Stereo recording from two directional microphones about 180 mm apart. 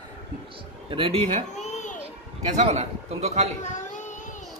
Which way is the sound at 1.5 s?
40° left (ahead or behind).